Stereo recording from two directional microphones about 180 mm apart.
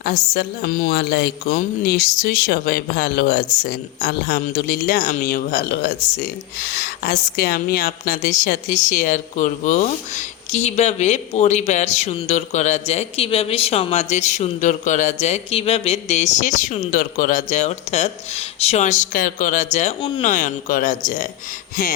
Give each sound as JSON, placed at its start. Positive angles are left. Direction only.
{"t": 0.0, "sound": "a woman's voice", "side_deg": 60}